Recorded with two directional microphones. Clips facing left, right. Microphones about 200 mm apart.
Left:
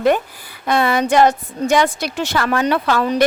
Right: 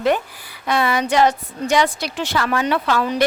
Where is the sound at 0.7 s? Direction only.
50° left (ahead or behind).